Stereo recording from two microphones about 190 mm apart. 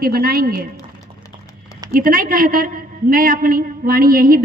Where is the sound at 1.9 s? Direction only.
45° right (ahead or behind).